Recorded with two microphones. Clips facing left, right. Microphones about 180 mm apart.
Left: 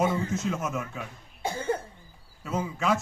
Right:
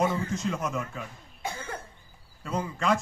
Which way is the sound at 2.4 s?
5° left (ahead or behind).